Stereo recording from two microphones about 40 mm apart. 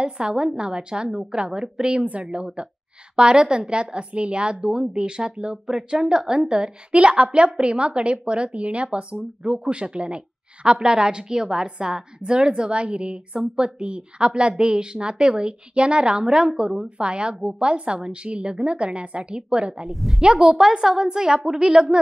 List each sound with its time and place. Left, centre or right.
0.0 s a woman's voice: right
19.7 s a woman's voice: centre
20.2 s a woman's voice: centre